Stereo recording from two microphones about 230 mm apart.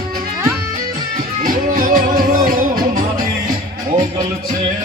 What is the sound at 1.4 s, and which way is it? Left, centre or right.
Music, right.